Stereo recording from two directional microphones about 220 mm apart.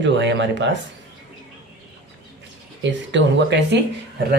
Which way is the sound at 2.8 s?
55° right (ahead or behind).